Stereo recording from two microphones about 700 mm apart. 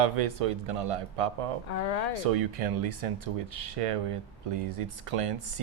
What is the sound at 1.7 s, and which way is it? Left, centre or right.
Speech, left.